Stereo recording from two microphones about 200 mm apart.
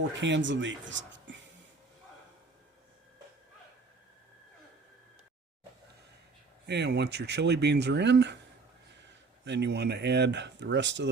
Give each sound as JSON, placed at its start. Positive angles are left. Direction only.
{"t": 0.2, "sound": "speech", "side_deg": -65}
{"t": 6.7, "sound": "speech", "side_deg": -55}
{"t": 9.4, "sound": "speech", "side_deg": -60}